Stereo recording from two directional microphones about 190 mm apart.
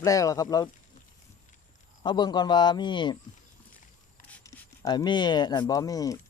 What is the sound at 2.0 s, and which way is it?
Speech, 20° left (ahead or behind).